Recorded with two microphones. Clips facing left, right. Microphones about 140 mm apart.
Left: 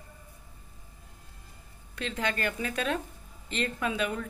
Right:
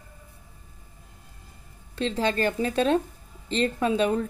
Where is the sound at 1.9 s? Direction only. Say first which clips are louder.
Right 7 dB; 30° right (ahead or behind).